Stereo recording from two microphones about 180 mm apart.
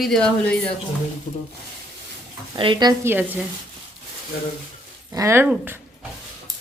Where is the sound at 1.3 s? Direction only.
50° left (ahead or behind).